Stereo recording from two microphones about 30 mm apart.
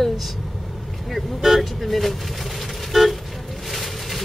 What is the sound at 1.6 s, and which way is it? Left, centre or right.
Speech, centre.